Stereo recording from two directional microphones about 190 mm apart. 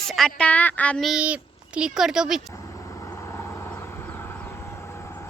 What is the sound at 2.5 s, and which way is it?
Vehicle, 15° left (ahead or behind).